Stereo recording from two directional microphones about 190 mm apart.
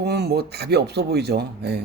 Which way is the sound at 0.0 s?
60° right (ahead or behind).